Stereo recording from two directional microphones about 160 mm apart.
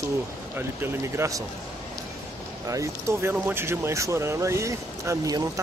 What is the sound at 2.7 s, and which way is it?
Speech, 20° right (ahead or behind).